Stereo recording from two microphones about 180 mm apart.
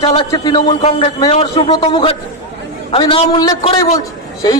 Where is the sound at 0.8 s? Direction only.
40° left (ahead or behind).